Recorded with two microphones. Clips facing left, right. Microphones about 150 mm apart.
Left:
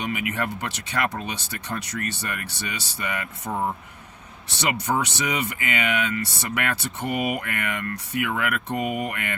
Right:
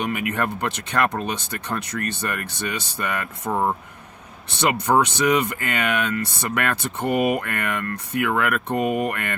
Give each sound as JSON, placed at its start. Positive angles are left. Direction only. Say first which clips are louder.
{"t": 0.0, "sound": "speech", "louder": "right 3 dB", "side_deg": -55}